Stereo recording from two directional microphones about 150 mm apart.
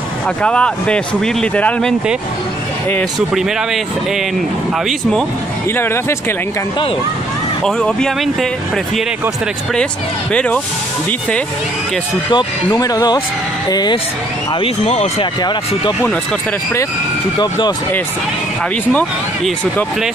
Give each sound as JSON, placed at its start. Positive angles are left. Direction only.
{"t": 0.4, "sound": "speech", "side_deg": 5}
{"t": 5.8, "sound": "speech", "side_deg": 15}
{"t": 7.6, "sound": "speech", "side_deg": 5}
{"t": 11.1, "sound": "speech", "side_deg": 10}
{"t": 12.3, "sound": "speech", "side_deg": 30}
{"t": 14.6, "sound": "speech", "side_deg": 45}
{"t": 17.4, "sound": "speech", "side_deg": 30}